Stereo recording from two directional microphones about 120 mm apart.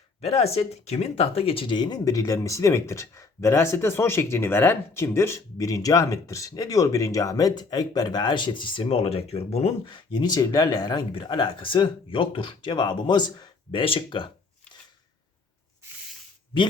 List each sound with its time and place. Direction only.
0.2 s speech: 60° left (ahead or behind); by 13.5 s 40° left (ahead or behind)
13.7 s speech: 50° left (ahead or behind)
16.5 s speech: 45° left (ahead or behind)